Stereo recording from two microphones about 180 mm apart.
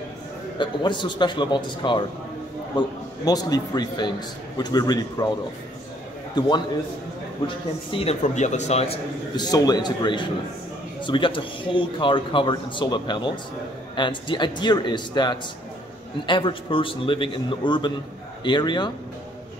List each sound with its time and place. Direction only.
0.6 s speech: 25° left (ahead or behind)
6.3 s a man's voice: 25° left (ahead or behind)